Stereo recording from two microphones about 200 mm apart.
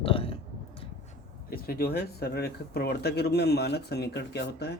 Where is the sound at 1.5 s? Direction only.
50° left (ahead or behind).